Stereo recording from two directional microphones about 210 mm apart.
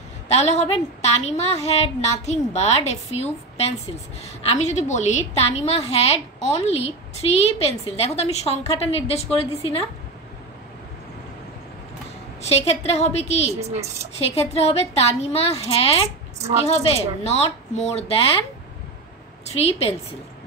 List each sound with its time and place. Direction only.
0.3 s a woman's voice: 30° left (ahead or behind)
12.4 s a woman's voice: 30° left (ahead or behind)
13.6 s a woman's voice: 30° right (ahead or behind)
14.1 s a woman's voice: 30° left (ahead or behind)
19.5 s a woman's voice: 30° left (ahead or behind)